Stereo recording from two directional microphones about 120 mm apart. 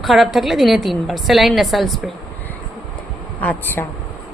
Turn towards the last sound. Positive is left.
turn(degrees=15)  # may be behind; listen again after turning